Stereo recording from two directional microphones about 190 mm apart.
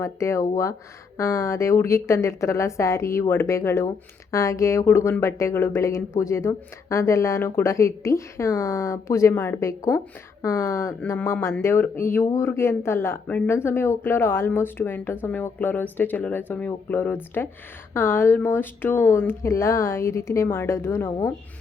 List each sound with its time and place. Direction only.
0.0 s speech: 15° left (ahead or behind)